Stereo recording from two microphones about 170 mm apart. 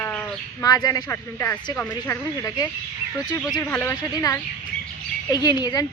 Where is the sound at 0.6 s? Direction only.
20° left (ahead or behind).